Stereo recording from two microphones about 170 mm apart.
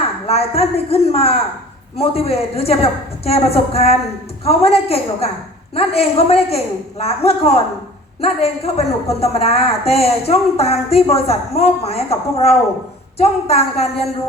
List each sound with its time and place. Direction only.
0.0 s a woman's voice: 35° left (ahead or behind)